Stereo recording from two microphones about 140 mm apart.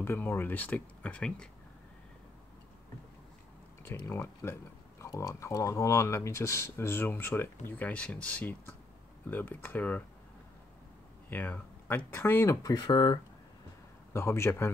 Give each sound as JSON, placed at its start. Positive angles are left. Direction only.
{"t": 0.0, "sound": "speech", "side_deg": 15}
{"t": 3.8, "sound": "speech", "side_deg": 15}
{"t": 11.2, "sound": "speech", "side_deg": 10}
{"t": 14.1, "sound": "speech", "side_deg": 20}